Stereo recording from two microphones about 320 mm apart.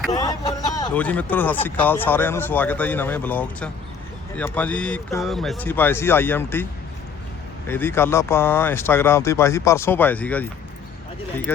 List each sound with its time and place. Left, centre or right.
0.1 s speech: centre
7.7 s speech: centre